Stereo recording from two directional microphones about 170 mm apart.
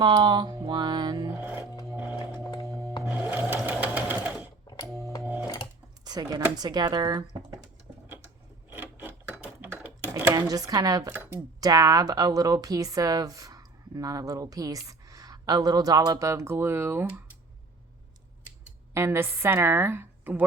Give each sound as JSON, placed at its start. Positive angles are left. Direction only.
{"t": 0.0, "sound": "music", "side_deg": -25}
{"t": 1.4, "sound": "music", "side_deg": -10}
{"t": 3.0, "sound": "wood", "side_deg": -5}
{"t": 3.2, "sound": "sewing machine", "side_deg": -15}
{"t": 4.6, "sound": "music", "side_deg": 25}
{"t": 5.2, "sound": "music", "side_deg": -10}
{"t": 6.1, "sound": "speech", "side_deg": -25}
{"t": 7.6, "sound": "a sound", "side_deg": -10}
{"t": 8.7, "sound": "computer keyboard", "side_deg": -10}
{"t": 11.1, "sound": "speech", "side_deg": -10}
{"t": 18.9, "sound": "a woman's voice", "side_deg": -15}